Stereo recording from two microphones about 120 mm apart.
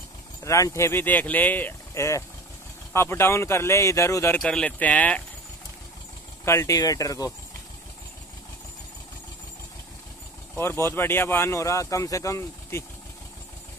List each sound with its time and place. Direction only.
0.4 s speech: 25° left (ahead or behind)
4.4 s speech: 10° left (ahead or behind)
6.4 s speech: 25° left (ahead or behind)
10.5 s speech: 20° left (ahead or behind)